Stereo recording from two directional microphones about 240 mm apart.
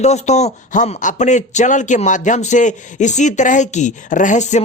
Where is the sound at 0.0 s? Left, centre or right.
Left.